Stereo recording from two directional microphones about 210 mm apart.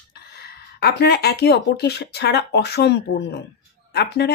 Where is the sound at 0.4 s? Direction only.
50° left (ahead or behind).